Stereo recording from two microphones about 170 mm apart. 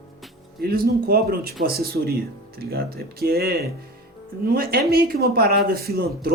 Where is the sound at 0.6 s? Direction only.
60° right (ahead or behind).